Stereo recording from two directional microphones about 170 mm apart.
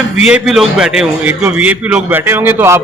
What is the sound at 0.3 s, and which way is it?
A man's voice, 5° right (ahead or behind).